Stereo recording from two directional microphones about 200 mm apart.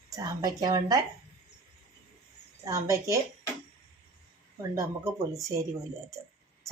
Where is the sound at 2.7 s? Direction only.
15° right (ahead or behind).